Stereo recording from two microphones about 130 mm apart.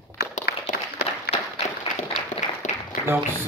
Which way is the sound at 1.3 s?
50° left (ahead or behind).